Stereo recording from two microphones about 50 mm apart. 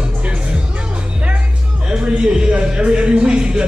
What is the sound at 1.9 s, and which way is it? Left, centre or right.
Speech, centre.